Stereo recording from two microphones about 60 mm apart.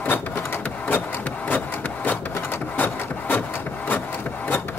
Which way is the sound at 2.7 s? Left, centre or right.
Left.